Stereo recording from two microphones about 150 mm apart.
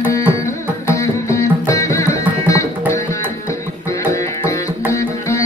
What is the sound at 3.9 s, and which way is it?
Music, 20° left (ahead or behind).